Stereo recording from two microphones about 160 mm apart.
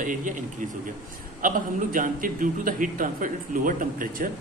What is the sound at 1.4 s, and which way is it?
A man's voice, 55° right (ahead or behind).